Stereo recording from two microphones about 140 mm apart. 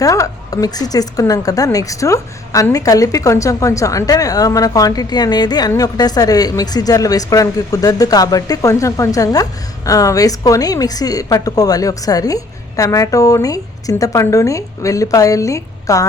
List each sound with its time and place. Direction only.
0.0 s a woman's voice: 25° left (ahead or behind)